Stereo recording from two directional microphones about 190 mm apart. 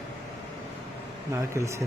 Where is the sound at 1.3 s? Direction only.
15° right (ahead or behind).